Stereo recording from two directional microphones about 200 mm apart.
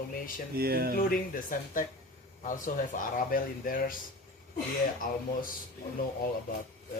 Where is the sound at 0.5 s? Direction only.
50° right (ahead or behind).